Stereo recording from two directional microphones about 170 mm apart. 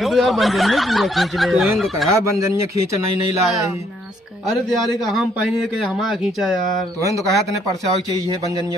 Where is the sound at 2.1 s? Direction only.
15° right (ahead or behind).